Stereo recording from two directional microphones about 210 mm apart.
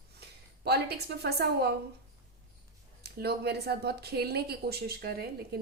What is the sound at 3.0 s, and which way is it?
Speech, 50° right (ahead or behind).